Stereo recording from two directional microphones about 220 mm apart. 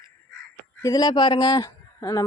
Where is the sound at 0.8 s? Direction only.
15° left (ahead or behind).